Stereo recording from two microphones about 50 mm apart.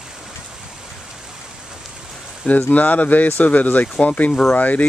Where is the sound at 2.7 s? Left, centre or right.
Left.